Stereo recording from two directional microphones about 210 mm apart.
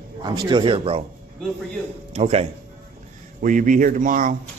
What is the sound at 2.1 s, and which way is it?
Speech, 30° right (ahead or behind).